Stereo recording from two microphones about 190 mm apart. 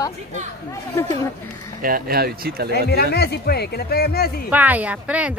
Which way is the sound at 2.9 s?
55° left (ahead or behind).